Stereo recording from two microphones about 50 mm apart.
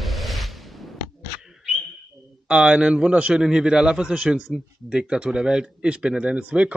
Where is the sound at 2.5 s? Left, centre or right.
Centre.